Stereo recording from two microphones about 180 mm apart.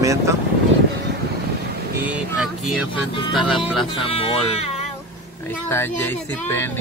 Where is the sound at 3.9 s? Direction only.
30° left (ahead or behind).